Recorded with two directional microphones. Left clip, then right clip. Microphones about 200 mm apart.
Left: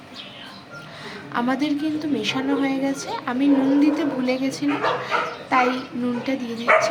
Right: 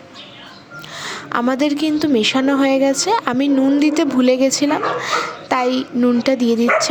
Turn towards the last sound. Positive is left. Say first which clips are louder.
# right 3 dB
turn(degrees=-45)  # may be behind; listen again after turning